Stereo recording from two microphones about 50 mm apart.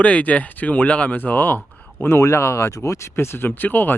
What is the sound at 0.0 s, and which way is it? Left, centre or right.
Speech, left.